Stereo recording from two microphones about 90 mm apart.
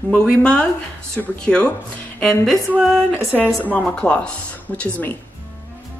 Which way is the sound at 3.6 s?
15° left (ahead or behind).